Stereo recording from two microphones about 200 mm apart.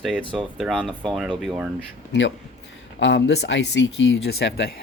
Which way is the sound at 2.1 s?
65° left (ahead or behind).